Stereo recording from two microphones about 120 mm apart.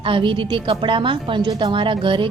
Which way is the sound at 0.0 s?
45° right (ahead or behind).